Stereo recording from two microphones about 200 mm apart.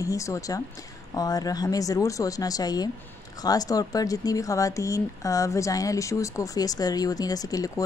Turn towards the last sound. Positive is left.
turn(degrees=15)  # may be behind; listen again after turning